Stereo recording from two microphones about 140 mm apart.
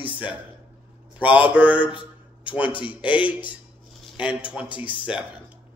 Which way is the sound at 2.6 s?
35° left (ahead or behind).